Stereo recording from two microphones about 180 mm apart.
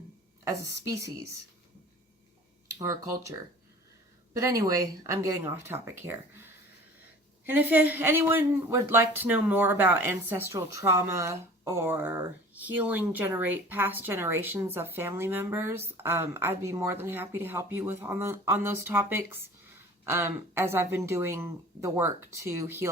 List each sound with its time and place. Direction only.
0.4 s speech: 20° right (ahead or behind)
2.6 s speech: 20° right (ahead or behind)